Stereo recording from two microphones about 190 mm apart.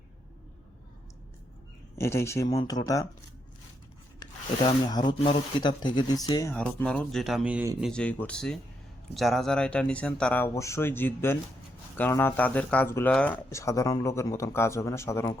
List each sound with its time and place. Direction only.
2.0 s speech: 15° left (ahead or behind)
4.2 s rub: 20° left (ahead or behind)
5.5 s speech: 25° left (ahead or behind)
6.5 s speech: 5° left (ahead or behind)